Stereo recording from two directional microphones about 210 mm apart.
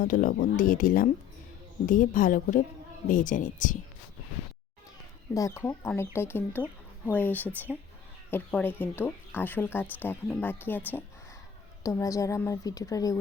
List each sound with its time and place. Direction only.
0.0 s speech: 40° left (ahead or behind)
5.3 s speech: 15° left (ahead or behind)